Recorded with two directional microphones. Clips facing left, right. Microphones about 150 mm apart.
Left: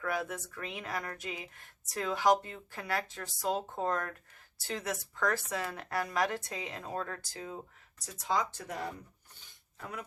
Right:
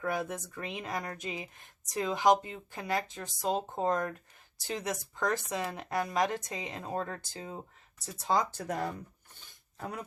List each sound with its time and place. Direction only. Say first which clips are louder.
0.0 s speech: right 2 dB; 20° right (ahead or behind)